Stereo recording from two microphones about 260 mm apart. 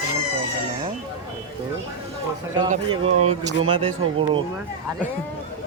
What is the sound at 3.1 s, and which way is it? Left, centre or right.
Speech, right.